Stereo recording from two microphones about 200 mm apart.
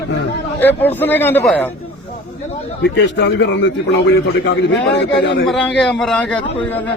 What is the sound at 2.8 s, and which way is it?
A man's voice, 60° left (ahead or behind).